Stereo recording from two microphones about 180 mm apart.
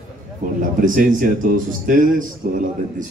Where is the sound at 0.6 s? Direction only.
50° right (ahead or behind).